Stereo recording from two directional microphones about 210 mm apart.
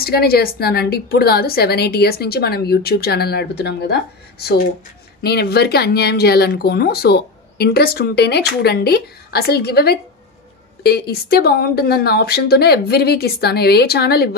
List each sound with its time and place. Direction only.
0.0 s speech: 45° left (ahead or behind)